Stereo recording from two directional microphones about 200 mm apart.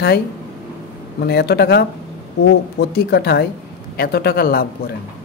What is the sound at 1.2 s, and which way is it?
Speech, 55° left (ahead or behind).